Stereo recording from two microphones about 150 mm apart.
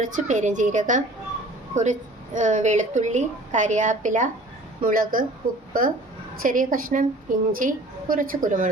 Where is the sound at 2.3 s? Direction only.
55° right (ahead or behind).